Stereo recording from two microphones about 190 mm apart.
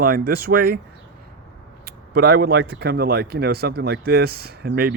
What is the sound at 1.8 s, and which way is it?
Speech, 55° right (ahead or behind).